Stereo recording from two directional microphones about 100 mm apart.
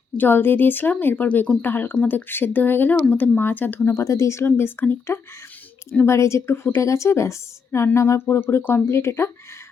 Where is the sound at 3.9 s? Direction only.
30° left (ahead or behind).